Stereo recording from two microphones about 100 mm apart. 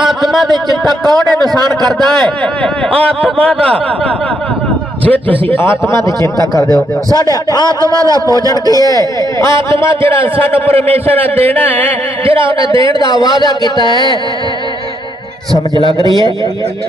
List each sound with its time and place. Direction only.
0.0 s a sound: centre (ahead or behind)
1.0 s a man's voice: 45° right (ahead or behind)
5.6 s a man's voice: 25° left (ahead or behind)
7.8 s a man's voice: 35° right (ahead or behind)
8.7 s a man's voice: 35° left (ahead or behind)
10.7 s a man's voice: 90° right
12.3 s a man's voice: 60° right (ahead or behind)
13.2 s a man's voice: 40° left (ahead or behind)
13.8 s carnatic music: 45° left (ahead or behind)